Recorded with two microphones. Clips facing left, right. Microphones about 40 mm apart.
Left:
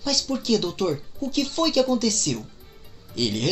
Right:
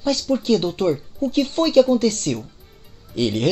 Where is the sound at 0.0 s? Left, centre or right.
Right.